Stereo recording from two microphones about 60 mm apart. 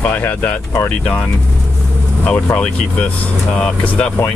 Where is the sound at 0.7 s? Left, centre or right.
Centre.